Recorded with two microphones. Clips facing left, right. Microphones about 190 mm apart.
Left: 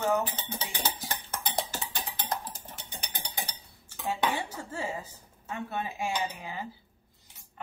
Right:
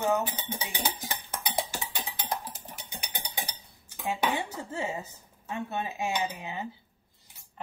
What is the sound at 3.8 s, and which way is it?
Speech, 15° right (ahead or behind).